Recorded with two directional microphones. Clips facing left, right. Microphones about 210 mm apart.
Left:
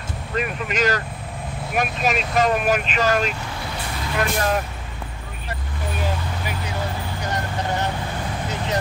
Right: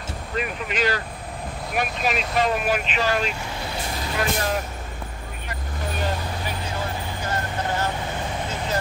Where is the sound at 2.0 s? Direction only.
45° left (ahead or behind).